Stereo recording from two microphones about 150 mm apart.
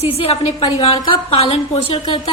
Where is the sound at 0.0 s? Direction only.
40° left (ahead or behind).